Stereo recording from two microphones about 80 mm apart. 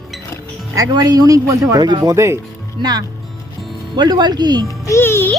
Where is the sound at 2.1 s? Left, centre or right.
Right.